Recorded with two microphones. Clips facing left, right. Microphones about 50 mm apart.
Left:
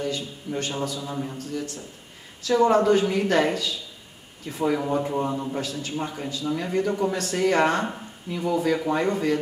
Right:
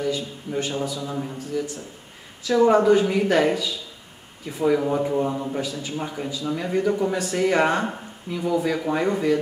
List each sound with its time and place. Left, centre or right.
0.1 s speech: centre
5.9 s speech: centre
8.3 s speech: centre